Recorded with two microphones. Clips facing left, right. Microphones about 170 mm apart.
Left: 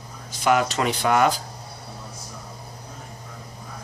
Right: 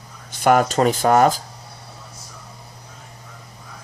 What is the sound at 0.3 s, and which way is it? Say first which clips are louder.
Speech: right 4 dB; 50° right (ahead or behind).